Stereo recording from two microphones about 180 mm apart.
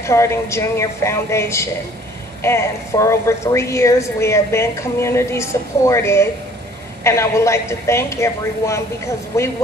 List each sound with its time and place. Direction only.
0.0 s a woman's voice: 15° left (ahead or behind)